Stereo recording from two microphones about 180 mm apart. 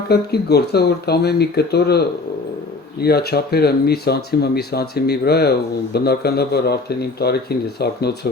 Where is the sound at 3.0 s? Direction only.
60° left (ahead or behind).